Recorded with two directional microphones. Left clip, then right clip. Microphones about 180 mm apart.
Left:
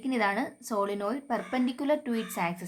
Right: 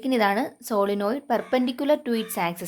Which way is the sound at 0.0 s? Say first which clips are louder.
Right 6 dB; 40° right (ahead or behind).